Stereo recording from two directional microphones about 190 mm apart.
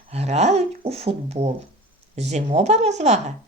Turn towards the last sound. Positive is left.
turn(degrees=-35)  # may be behind; listen again after turning